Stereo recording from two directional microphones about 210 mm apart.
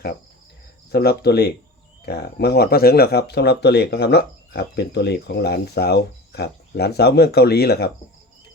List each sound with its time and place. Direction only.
0.9 s speech: 50° left (ahead or behind)